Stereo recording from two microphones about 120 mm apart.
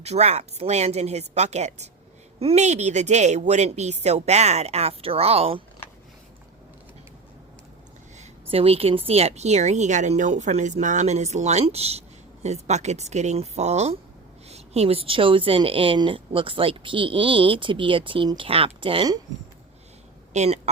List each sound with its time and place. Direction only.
0.0 s speech: 65° right (ahead or behind)
8.2 s speech: 55° right (ahead or behind)
20.3 s speech: 70° right (ahead or behind)